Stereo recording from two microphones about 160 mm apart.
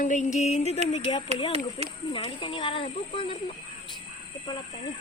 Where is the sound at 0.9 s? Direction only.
35° left (ahead or behind).